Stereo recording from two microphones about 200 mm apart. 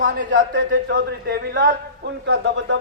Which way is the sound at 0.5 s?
55° right (ahead or behind).